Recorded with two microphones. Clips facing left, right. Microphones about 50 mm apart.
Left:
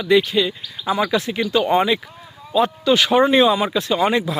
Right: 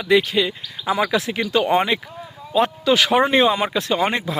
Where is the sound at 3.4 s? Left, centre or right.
Right.